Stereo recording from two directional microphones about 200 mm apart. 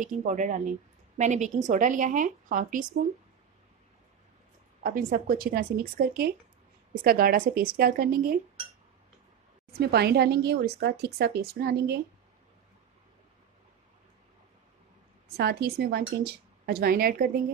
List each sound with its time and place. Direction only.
0.0 s a woman's voice: 40° right (ahead or behind)
4.8 s speech: 45° right (ahead or behind)
9.7 s speech: 55° right (ahead or behind)
15.2 s speech: 55° right (ahead or behind)